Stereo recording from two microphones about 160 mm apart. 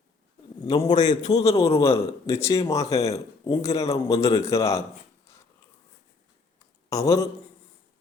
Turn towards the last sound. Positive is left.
turn(degrees=20)  # may be behind; listen again after turning